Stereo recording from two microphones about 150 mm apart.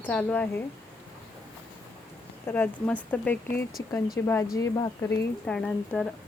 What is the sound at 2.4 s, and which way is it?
Speech, 10° left (ahead or behind).